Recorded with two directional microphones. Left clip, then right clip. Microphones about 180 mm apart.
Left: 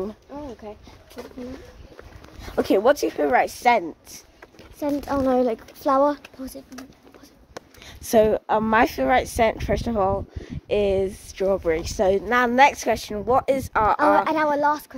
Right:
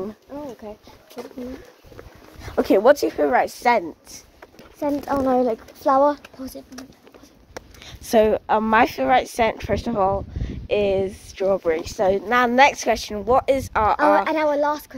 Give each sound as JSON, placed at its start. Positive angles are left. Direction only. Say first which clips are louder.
{"t": 0.6, "sound": "speech", "louder": "right 1 dB", "side_deg": -15}
{"t": 2.4, "sound": "speech", "louder": "right 3 dB", "side_deg": -15}
{"t": 3.3, "sound": "speech", "louder": "left 1 dB", "side_deg": 5}
{"t": 4.8, "sound": "speech", "louder": "right 1 dB", "side_deg": 25}
{"t": 7.8, "sound": "a sound", "louder": "right 1 dB", "side_deg": 10}
{"t": 8.3, "sound": "speech", "louder": "right 2 dB", "side_deg": 0}
{"t": 11.8, "sound": "speech", "louder": "right 1 dB", "side_deg": 20}
{"t": 12.3, "sound": "speech", "louder": "right 2 dB", "side_deg": 0}
{"t": 14.1, "sound": "speech", "louder": "right 1 dB", "side_deg": -10}